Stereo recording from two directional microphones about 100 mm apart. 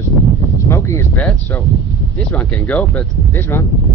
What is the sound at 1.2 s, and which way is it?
Speech, 20° left (ahead or behind).